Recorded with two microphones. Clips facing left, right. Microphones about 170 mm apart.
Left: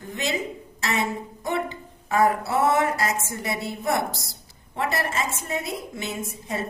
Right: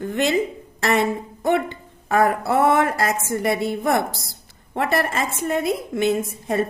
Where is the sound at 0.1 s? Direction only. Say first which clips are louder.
Right 7 dB; 55° right (ahead or behind).